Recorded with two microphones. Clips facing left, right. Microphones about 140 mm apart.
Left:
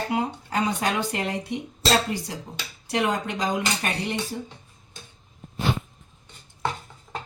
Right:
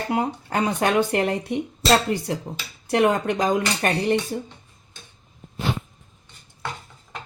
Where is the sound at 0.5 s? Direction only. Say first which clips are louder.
Right 5 dB; 55° right (ahead or behind).